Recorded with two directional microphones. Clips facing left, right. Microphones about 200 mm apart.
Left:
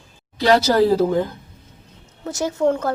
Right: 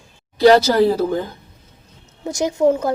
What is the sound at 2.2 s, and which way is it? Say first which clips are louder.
Speech: right 3 dB; 15° right (ahead or behind).